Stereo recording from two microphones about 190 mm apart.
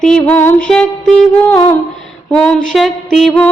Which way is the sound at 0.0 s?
5° left (ahead or behind).